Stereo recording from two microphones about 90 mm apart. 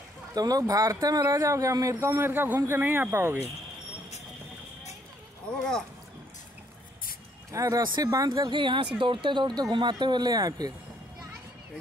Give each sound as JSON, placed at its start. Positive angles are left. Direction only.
{"t": 0.3, "sound": "speech", "side_deg": -45}
{"t": 2.1, "sound": "speech", "side_deg": -25}
{"t": 7.5, "sound": "speech", "side_deg": -35}
{"t": 7.8, "sound": "speech", "side_deg": -55}
{"t": 8.1, "sound": "speech", "side_deg": -40}